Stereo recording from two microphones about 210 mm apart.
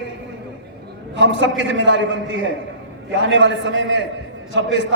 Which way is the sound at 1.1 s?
60° right (ahead or behind).